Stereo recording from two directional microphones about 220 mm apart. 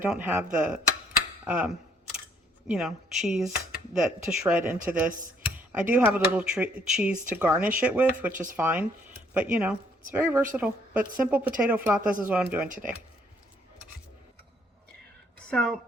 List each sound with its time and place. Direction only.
0.0 s a woman's voice: 10° right (ahead or behind)
12.6 s speech: 35° right (ahead or behind)
15.4 s speech: 5° left (ahead or behind)